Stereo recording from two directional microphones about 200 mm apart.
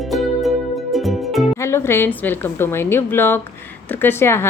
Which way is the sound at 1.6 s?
10° left (ahead or behind).